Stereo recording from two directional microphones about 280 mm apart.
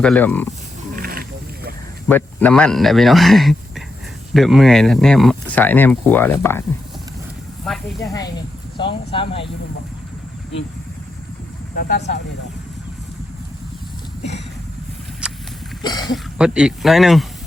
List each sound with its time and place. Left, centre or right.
0.0 s speech: centre
0.9 s a sound: right
2.0 s speech: centre
8.0 s speech: centre
11.8 s speech: left
15.2 s horse: centre
15.8 s speech: centre
16.1 s speech: centre